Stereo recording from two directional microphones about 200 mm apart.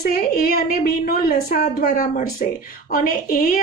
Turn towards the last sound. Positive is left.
turn(degrees=45)  # may be behind; listen again after turning